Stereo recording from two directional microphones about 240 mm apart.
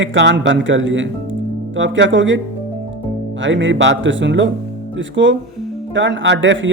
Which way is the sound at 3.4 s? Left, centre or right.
Right.